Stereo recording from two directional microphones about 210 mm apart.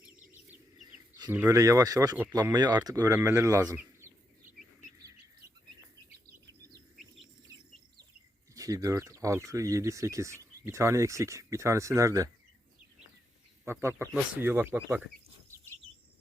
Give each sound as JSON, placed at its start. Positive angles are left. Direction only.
{"t": 1.2, "sound": "speech", "side_deg": -15}
{"t": 8.5, "sound": "speech", "side_deg": -15}
{"t": 13.7, "sound": "speech", "side_deg": -10}